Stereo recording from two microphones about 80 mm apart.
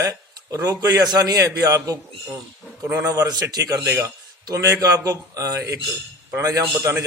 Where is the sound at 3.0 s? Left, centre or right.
Right.